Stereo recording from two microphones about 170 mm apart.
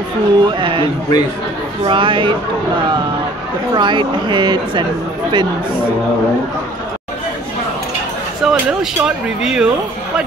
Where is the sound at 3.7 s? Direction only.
25° right (ahead or behind).